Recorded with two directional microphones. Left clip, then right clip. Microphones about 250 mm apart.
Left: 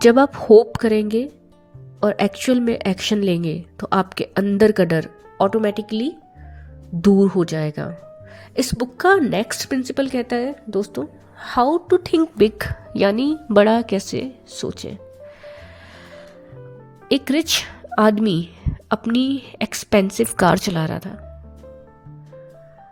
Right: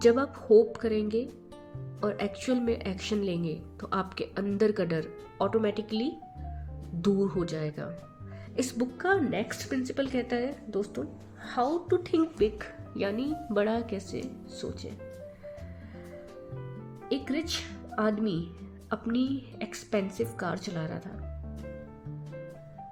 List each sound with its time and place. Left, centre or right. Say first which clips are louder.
0.0 s a woman's voice: left 11 dB; left
17.1 s a woman's voice: left 13 dB; left